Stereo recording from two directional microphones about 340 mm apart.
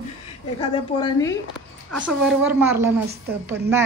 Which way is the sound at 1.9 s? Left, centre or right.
Centre.